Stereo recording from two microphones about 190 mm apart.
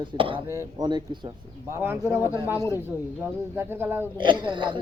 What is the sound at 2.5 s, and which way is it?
Speech, 15° left (ahead or behind).